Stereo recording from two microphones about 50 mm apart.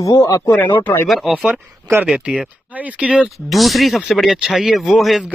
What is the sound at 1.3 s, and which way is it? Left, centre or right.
Speech, right.